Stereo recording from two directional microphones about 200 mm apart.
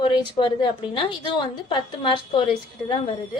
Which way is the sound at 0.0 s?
25° left (ahead or behind).